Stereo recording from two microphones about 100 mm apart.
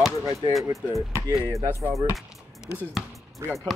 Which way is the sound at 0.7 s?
30° right (ahead or behind).